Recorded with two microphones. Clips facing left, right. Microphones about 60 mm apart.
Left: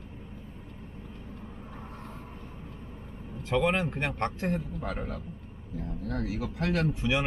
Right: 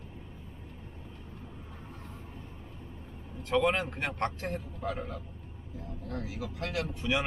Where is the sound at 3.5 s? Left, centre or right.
Centre.